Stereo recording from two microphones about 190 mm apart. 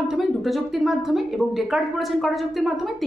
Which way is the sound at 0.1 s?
Centre (ahead or behind).